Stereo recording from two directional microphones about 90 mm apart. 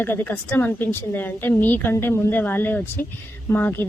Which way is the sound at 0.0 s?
25° left (ahead or behind).